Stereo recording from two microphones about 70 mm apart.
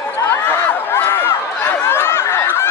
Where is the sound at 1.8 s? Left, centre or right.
Left.